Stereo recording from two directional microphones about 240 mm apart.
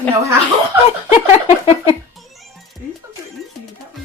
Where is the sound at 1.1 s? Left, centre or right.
Left.